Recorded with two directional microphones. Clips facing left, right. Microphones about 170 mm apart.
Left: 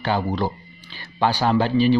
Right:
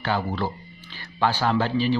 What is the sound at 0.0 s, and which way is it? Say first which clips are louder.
Speech: left 3 dB; 15° left (ahead or behind).